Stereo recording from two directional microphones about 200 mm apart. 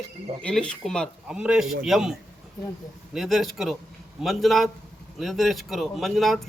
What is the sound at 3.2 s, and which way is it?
Speech, centre (ahead or behind).